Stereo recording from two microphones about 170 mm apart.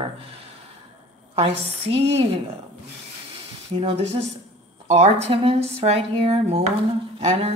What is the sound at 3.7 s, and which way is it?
Speech, 35° right (ahead or behind).